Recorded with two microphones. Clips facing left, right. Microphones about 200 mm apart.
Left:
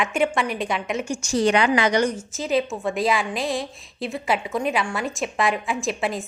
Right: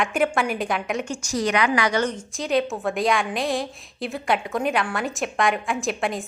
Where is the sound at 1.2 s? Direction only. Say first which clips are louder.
Left 5 dB; 25° left (ahead or behind).